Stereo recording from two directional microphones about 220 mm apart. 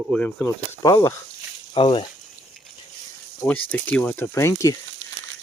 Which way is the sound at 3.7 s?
5° left (ahead or behind).